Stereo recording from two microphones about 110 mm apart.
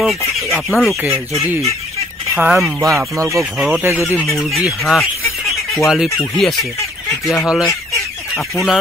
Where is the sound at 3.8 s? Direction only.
20° right (ahead or behind).